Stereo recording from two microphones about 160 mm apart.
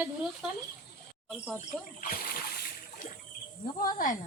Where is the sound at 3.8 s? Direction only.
60° left (ahead or behind).